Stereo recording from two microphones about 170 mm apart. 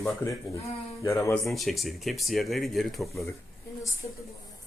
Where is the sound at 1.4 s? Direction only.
Centre (ahead or behind).